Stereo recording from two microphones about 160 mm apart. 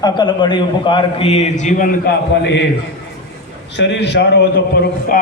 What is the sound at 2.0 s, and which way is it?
Speech, 90° left.